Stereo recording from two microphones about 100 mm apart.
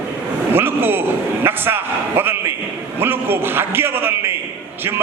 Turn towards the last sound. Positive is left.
turn(degrees=-25)  # may be behind; listen again after turning